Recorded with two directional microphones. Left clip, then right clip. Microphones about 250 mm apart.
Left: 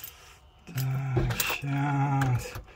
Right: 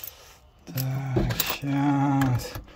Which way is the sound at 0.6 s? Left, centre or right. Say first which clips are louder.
Right 3 dB; centre.